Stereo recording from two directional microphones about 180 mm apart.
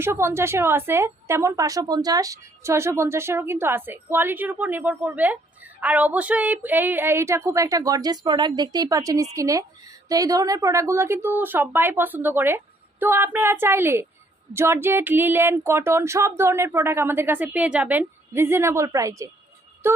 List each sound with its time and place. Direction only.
0.0 s a woman's voice: 15° right (ahead or behind)